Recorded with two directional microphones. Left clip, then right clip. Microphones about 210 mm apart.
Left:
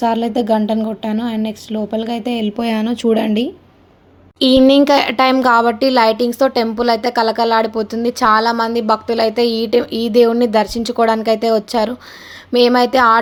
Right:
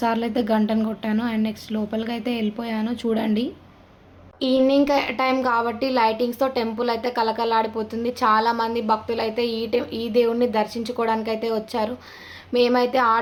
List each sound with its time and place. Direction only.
0.0 s a woman's voice: 20° left (ahead or behind)
2.6 s a woman's voice: 35° left (ahead or behind)
4.4 s a woman's voice: 45° left (ahead or behind)